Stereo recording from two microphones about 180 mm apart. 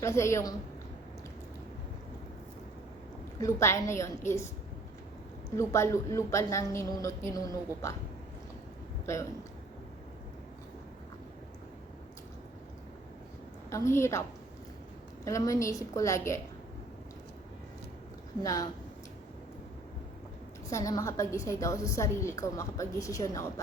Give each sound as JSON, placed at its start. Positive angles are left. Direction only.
{"t": 0.0, "sound": "a woman's voice", "side_deg": 15}
{"t": 3.4, "sound": "a woman's voice", "side_deg": 15}
{"t": 5.5, "sound": "a woman's voice", "side_deg": 15}
{"t": 13.7, "sound": "a woman's voice", "side_deg": 15}
{"t": 18.4, "sound": "speech", "side_deg": 20}
{"t": 20.7, "sound": "a woman's voice", "side_deg": 20}